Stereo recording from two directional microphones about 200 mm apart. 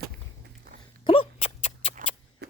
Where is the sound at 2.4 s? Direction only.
55° right (ahead or behind).